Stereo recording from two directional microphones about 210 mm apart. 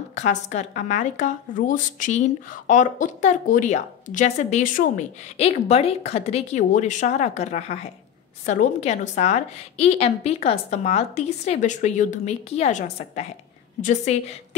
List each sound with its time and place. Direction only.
0.1 s a woman's voice: 35° left (ahead or behind)